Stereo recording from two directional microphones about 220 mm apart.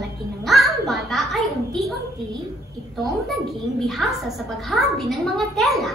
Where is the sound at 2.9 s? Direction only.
Centre (ahead or behind).